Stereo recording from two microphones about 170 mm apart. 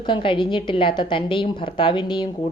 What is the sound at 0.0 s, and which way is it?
A woman's voice, 30° left (ahead or behind).